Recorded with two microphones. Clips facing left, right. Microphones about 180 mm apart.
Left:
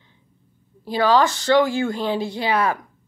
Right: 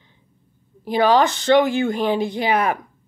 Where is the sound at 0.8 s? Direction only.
20° right (ahead or behind).